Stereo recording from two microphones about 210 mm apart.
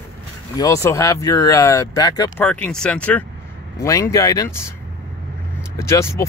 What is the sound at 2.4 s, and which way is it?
Speech, 5° left (ahead or behind).